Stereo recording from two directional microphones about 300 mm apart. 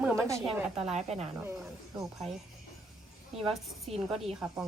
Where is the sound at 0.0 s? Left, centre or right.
Centre.